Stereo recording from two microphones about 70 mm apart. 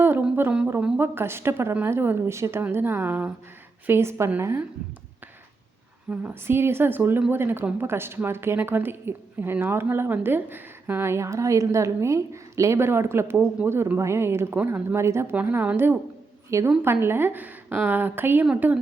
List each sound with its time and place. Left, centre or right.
0.0 s a sound: right
0.9 s a woman's voice: right
3.8 s a woman's voice: right
6.1 s a woman's voice: centre
6.5 s a woman's voice: right
13.6 s a woman's voice: right
14.0 s a woman's voice: right
15.4 s a woman's voice: right